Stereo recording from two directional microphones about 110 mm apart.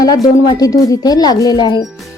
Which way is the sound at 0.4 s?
35° left (ahead or behind).